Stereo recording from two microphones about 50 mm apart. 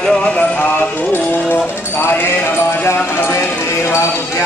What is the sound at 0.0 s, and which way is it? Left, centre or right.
Music, centre.